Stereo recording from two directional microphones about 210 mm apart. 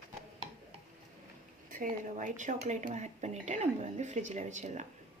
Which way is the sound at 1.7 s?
40° right (ahead or behind).